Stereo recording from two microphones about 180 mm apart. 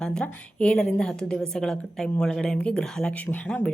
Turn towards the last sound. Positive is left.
turn(degrees=10)  # may be behind; listen again after turning